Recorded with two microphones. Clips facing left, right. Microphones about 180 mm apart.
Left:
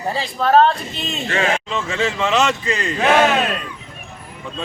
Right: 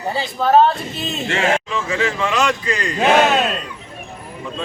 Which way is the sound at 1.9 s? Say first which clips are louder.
Left 1 dB; 25° left (ahead or behind).